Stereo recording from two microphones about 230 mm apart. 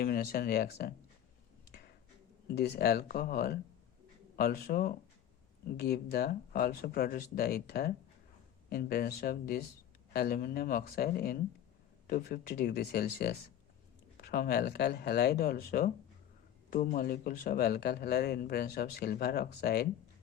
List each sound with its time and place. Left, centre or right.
0.0 s speech: left
2.5 s speech: left